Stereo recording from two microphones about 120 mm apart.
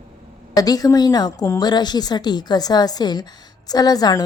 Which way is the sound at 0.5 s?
30° left (ahead or behind).